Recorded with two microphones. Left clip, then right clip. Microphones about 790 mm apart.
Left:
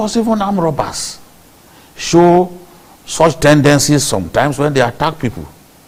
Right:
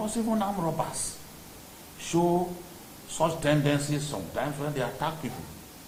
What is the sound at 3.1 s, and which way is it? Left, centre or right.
A man's voice, left.